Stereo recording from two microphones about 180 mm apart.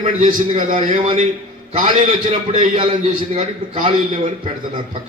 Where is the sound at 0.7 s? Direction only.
30° right (ahead or behind).